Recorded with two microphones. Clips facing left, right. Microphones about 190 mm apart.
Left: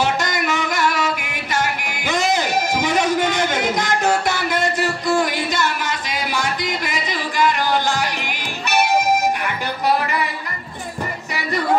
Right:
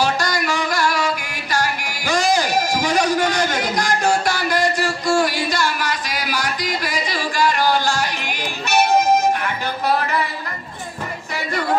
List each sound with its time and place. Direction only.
0.0 s music: 20° left (ahead or behind)